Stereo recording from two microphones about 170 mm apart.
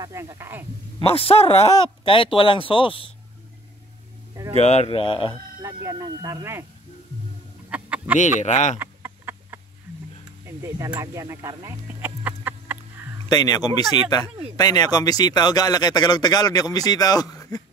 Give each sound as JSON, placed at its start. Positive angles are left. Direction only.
{"t": 0.0, "sound": "speech", "side_deg": -20}
{"t": 1.0, "sound": "speech", "side_deg": 35}
{"t": 4.6, "sound": "speech", "side_deg": 40}
{"t": 5.6, "sound": "speech", "side_deg": -20}
{"t": 7.7, "sound": "chicken", "side_deg": -10}
{"t": 8.2, "sound": "speech", "side_deg": 45}
{"t": 8.7, "sound": "a sound", "side_deg": -15}
{"t": 10.4, "sound": "speech", "side_deg": -15}
{"t": 13.3, "sound": "speech", "side_deg": 25}